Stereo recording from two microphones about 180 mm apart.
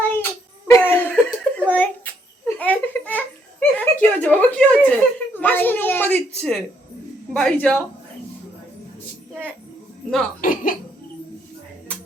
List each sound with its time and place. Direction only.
0.0 s a sound: 10° left (ahead or behind)
0.7 s giggle: 10° left (ahead or behind)
7.3 s a man's voice: 5° left (ahead or behind)
10.4 s music: 50° left (ahead or behind)